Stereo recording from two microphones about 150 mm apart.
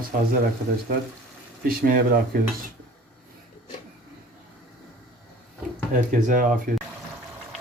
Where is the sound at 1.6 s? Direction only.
80° right.